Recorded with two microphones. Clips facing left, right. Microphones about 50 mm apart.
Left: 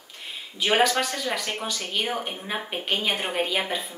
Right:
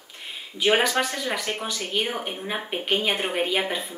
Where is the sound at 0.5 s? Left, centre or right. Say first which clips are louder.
Right 1 dB; centre.